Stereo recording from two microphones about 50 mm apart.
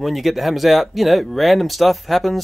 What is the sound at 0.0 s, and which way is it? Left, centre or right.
Speech, centre.